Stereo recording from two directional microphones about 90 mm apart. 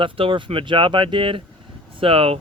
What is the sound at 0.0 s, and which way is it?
Speech, 70° right (ahead or behind).